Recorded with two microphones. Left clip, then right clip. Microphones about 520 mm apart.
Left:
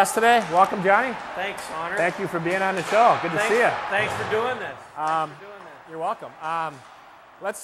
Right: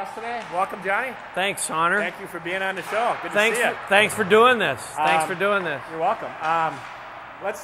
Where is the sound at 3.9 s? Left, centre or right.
Right.